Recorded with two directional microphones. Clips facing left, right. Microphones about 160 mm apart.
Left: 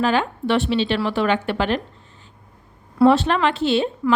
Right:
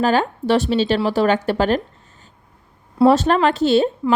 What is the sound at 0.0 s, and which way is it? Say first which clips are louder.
A woman's voice: right 2 dB; 40° right (ahead or behind).